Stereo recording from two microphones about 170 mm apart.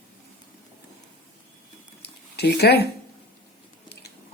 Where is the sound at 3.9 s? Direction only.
70° left (ahead or behind).